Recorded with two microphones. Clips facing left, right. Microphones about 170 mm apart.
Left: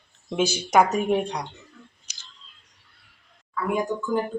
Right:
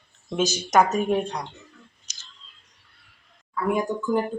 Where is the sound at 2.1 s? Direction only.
10° left (ahead or behind).